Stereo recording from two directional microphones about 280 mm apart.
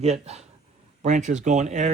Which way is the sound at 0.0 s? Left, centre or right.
Right.